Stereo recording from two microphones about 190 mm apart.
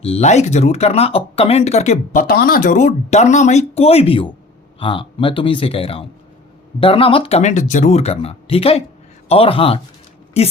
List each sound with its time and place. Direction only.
0.0 s speech: 35° left (ahead or behind)
2.2 s speech: 50° left (ahead or behind); by 10.5 s 35° left (ahead or behind)